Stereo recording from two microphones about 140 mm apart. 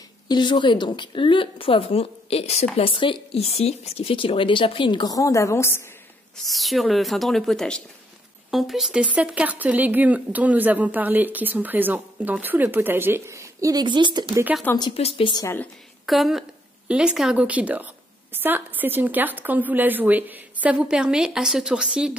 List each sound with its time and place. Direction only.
0.3 s speech: 35° left (ahead or behind)
6.3 s speech: centre (ahead or behind); by 14.4 s 30° right (ahead or behind)
15.0 s speech: 45° left (ahead or behind)
15.4 s speech: 15° left (ahead or behind)
16.1 s speech: centre (ahead or behind)